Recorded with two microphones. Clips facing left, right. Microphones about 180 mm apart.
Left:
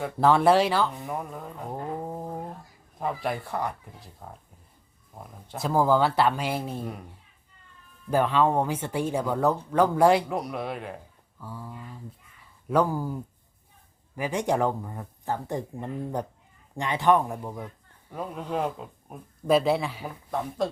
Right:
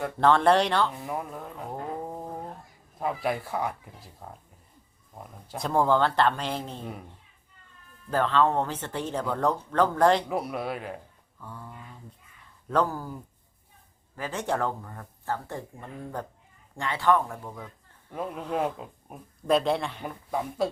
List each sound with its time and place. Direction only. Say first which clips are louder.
0.0 s speech: left 1 dB; 5° left (ahead or behind)
8.1 s speech: left 1 dB; 10° left (ahead or behind)
10.3 s speech: even; 5° right (ahead or behind); by 17.7 s 15° left (ahead or behind)
18.1 s speech: even; centre (ahead or behind)